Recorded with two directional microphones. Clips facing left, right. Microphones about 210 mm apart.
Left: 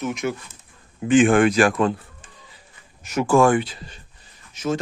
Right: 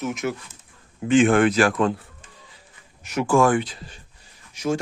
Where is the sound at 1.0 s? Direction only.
15° left (ahead or behind).